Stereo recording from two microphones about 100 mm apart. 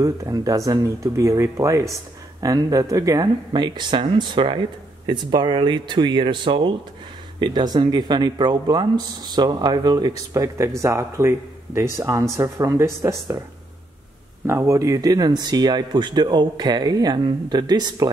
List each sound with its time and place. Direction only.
0.0 s speech: 35° right (ahead or behind)
3.5 s speech: 50° right (ahead or behind); by 13.4 s 30° right (ahead or behind)
14.4 s speech: 30° right (ahead or behind)